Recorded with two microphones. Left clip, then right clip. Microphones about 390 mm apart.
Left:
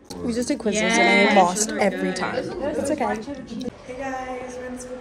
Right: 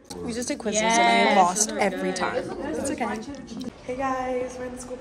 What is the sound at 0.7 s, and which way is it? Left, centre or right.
Speech, right.